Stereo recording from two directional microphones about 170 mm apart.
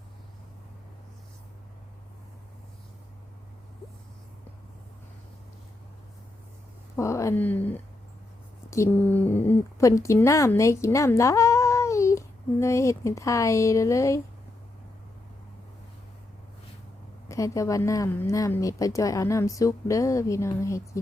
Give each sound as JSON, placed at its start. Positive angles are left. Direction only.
{"t": 6.9, "sound": "a woman's voice", "side_deg": 15}
{"t": 17.2, "sound": "a woman's voice", "side_deg": 20}